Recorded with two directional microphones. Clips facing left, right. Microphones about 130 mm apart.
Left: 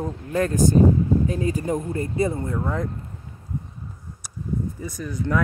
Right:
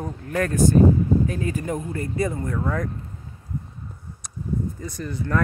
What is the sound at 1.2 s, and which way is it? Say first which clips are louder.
Speech: left 2 dB; 25° left (ahead or behind).